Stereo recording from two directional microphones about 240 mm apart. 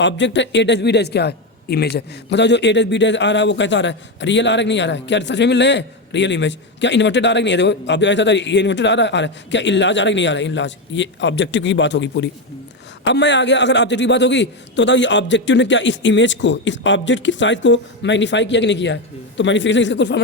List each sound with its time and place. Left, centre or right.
0.0 s a man's voice: left